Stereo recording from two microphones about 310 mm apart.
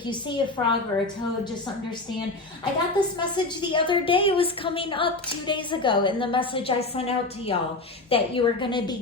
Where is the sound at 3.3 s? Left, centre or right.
Centre.